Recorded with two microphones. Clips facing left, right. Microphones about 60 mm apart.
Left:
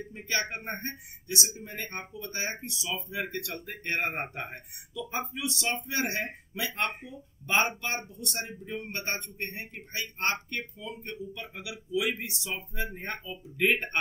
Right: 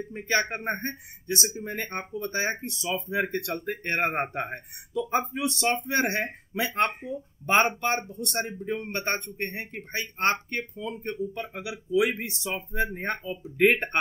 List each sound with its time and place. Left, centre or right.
0.1 s speech: right